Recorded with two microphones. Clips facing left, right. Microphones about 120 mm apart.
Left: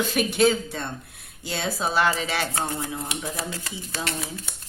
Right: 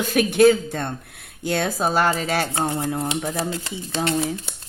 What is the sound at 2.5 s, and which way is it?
Speech, 25° right (ahead or behind).